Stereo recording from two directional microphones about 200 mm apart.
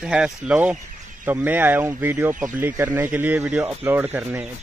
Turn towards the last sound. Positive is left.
turn(degrees=-10)  # may be behind; listen again after turning